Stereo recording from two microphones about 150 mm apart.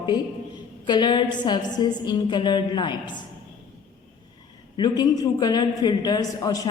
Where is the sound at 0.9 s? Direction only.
30° left (ahead or behind).